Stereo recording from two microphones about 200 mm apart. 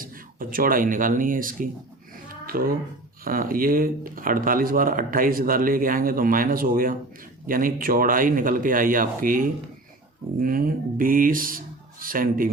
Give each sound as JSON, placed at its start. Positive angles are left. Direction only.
{"t": 0.0, "sound": "speech", "side_deg": -45}